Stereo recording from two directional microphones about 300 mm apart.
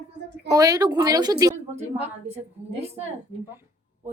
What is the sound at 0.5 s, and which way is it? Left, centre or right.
A woman's voice, centre.